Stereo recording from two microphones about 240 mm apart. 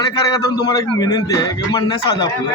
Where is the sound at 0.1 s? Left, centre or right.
Centre.